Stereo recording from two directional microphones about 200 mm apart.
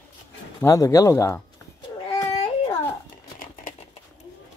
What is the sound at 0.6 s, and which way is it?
Speech, 15° left (ahead or behind).